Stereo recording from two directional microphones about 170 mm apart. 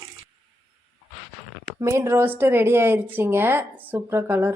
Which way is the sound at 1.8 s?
15° right (ahead or behind).